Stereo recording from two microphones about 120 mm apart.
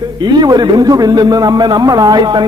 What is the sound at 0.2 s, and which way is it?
A man's voice, 35° right (ahead or behind).